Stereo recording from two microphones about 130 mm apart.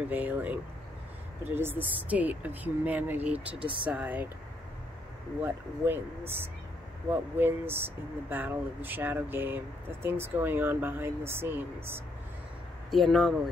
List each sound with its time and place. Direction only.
0.1 s speech: 10° right (ahead or behind)
3.5 s speech: 40° right (ahead or behind)
3.8 s speech: 10° right (ahead or behind)
5.4 s speech: 15° right (ahead or behind)
12.9 s speech: centre (ahead or behind)